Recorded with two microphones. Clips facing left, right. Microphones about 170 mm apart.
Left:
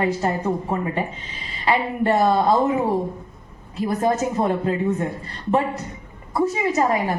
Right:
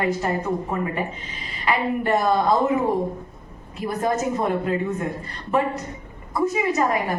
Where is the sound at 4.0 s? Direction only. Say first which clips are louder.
Left 1 dB; 30° left (ahead or behind).